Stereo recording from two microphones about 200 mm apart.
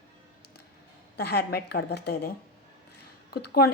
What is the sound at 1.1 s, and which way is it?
A woman's voice, 55° left (ahead or behind).